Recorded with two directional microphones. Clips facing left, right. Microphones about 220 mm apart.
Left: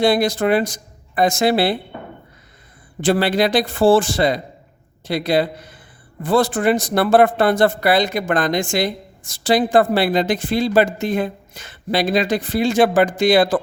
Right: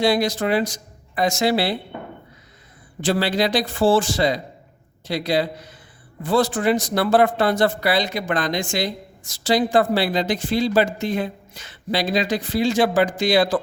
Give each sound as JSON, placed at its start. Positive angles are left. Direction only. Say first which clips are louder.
{"t": 0.0, "sound": "speech", "louder": "left 3 dB", "side_deg": 55}
{"t": 3.0, "sound": "speech", "louder": "left 4 dB", "side_deg": 55}